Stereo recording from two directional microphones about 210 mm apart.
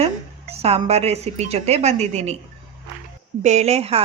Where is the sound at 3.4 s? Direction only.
35° right (ahead or behind).